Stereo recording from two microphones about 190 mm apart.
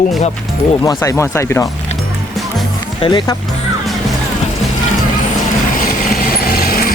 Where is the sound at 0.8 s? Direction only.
20° left (ahead or behind).